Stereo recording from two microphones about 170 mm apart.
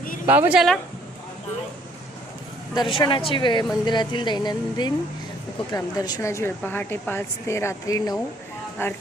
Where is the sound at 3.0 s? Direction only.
30° left (ahead or behind).